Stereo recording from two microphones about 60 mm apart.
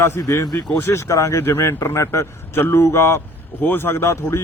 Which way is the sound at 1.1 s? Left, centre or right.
Left.